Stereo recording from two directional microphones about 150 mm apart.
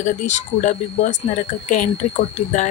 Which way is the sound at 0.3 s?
55° left (ahead or behind).